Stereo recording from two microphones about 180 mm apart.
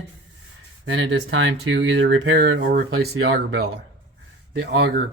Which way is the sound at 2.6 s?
55° right (ahead or behind).